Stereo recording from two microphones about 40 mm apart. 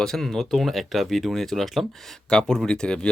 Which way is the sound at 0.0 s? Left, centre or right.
Centre.